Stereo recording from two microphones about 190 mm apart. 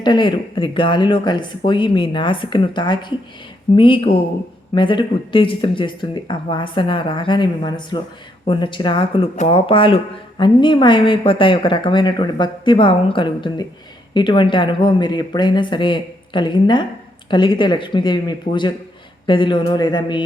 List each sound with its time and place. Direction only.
0.0 s speech: 25° left (ahead or behind)